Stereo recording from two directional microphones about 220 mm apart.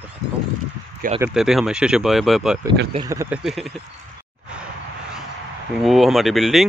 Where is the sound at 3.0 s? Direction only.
15° right (ahead or behind).